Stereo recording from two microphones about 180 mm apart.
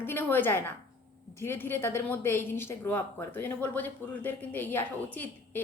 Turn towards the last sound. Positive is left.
turn(degrees=10)  # may be behind; listen again after turning